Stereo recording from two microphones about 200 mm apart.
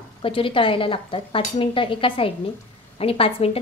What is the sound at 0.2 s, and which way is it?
A woman's voice, 25° left (ahead or behind).